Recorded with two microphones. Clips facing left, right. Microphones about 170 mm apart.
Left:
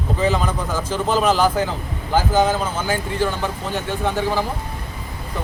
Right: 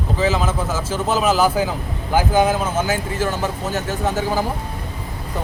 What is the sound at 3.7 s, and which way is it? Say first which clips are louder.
Speech: even; 40° right (ahead or behind).